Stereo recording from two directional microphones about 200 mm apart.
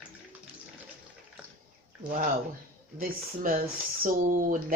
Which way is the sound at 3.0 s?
40° right (ahead or behind).